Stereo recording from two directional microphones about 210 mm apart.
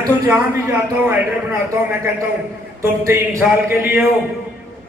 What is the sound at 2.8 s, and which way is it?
Speech, 15° right (ahead or behind).